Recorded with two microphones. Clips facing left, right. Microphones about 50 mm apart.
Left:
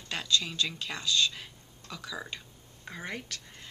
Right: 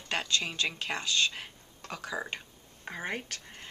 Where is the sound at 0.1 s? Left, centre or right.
Right.